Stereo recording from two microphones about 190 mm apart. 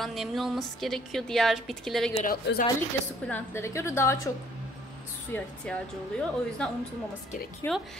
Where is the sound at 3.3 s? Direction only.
10° left (ahead or behind).